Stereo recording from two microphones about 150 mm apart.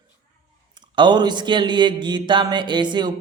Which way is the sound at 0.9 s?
30° right (ahead or behind).